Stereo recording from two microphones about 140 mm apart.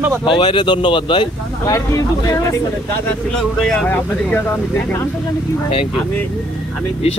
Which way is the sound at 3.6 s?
5° left (ahead or behind).